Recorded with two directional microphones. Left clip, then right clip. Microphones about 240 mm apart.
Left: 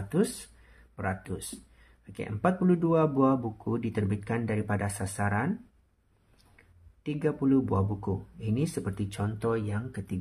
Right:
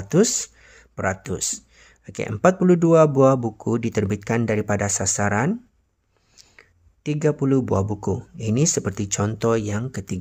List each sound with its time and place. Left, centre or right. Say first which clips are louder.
0.1 s speech: right 11 dB; right